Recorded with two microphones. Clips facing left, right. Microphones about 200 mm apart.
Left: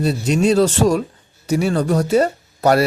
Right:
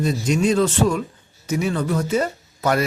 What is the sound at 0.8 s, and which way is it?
A man's voice, 40° left (ahead or behind).